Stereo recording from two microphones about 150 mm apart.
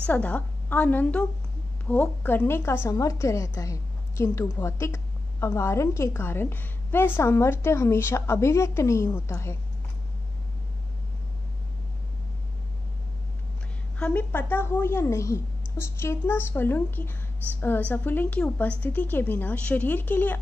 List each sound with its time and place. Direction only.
0.0 s a woman's voice: 10° left (ahead or behind)
13.9 s a woman's voice: 10° left (ahead or behind)